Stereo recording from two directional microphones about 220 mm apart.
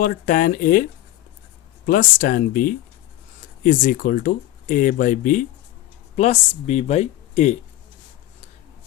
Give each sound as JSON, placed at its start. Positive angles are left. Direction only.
{"t": 0.0, "sound": "speech", "side_deg": 40}
{"t": 1.9, "sound": "speech", "side_deg": 40}